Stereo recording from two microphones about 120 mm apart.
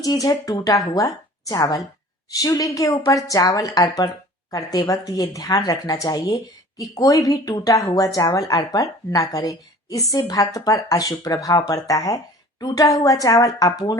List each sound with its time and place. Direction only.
0.0 s a woman's voice: 30° left (ahead or behind)